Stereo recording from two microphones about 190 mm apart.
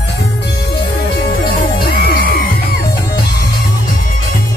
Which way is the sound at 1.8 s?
50° left (ahead or behind).